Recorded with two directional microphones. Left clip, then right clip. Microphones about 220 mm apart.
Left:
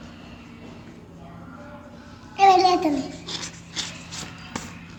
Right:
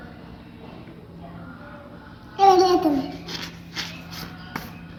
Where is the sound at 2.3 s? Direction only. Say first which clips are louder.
Even; 20° left (ahead or behind).